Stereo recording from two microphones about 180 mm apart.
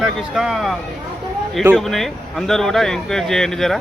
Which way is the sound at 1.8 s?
Centre (ahead or behind).